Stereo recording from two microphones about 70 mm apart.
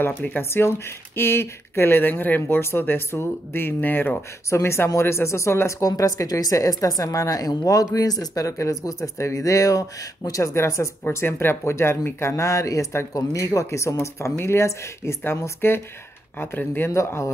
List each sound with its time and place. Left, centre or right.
0.0 s speech: left
4.5 s speech: left
16.9 s speech: left